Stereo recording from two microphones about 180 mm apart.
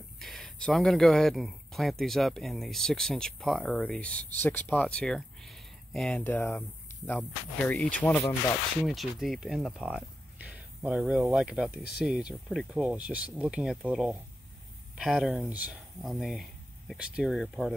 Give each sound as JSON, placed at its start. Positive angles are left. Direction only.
{"t": 0.2, "sound": "speech", "side_deg": 0}
{"t": 8.8, "sound": "speech", "side_deg": 0}